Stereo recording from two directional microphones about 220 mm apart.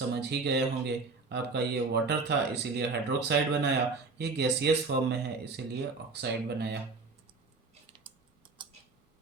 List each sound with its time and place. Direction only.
0.1 s speech: 50° right (ahead or behind)
8.1 s tick-tock: 20° right (ahead or behind)
8.6 s tick: 20° right (ahead or behind)